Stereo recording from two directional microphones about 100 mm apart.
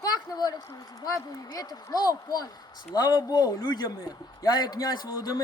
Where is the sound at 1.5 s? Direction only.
40° left (ahead or behind).